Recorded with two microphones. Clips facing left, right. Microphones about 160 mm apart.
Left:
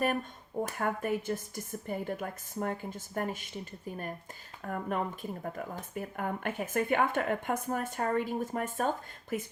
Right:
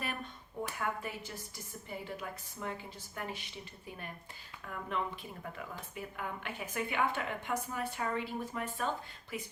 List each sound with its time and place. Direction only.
0.6 s speech: 50° left (ahead or behind)